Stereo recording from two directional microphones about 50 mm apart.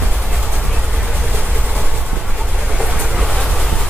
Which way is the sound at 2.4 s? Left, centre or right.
Centre.